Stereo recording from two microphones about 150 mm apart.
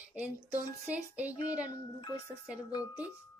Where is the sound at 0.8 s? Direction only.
10° right (ahead or behind).